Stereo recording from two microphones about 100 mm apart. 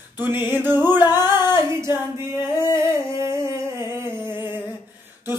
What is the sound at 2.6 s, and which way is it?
Humming, 25° right (ahead or behind).